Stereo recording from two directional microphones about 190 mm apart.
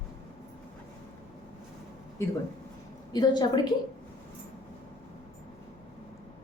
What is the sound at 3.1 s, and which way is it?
Speech, 20° left (ahead or behind).